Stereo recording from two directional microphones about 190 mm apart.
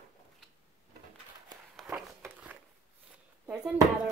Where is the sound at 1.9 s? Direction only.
10° right (ahead or behind).